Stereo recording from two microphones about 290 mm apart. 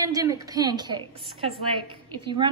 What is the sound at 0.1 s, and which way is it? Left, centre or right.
A woman's voice, centre.